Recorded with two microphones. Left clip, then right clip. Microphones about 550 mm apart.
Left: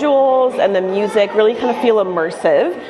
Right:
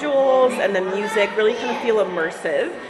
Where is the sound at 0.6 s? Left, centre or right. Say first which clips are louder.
Left 6 dB; left.